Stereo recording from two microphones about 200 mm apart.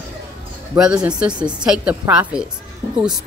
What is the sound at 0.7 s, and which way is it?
Speech, 5° right (ahead or behind).